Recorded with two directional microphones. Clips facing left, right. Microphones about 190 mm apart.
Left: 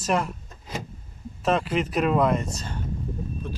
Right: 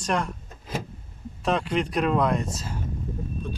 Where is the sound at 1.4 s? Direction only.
Centre (ahead or behind).